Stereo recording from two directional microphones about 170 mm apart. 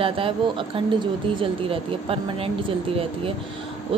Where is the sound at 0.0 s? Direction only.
30° right (ahead or behind).